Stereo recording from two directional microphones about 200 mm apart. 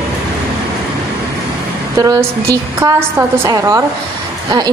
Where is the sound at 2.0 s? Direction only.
15° right (ahead or behind).